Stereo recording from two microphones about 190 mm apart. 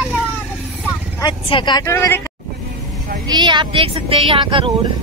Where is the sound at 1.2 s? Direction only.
25° left (ahead or behind).